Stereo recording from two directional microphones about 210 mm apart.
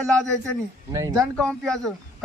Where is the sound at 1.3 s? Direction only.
5° left (ahead or behind).